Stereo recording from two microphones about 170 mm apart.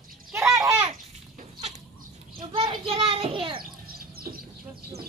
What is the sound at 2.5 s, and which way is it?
A child's voice, 30° right (ahead or behind).